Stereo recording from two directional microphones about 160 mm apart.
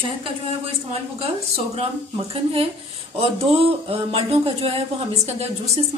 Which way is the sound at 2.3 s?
35° right (ahead or behind).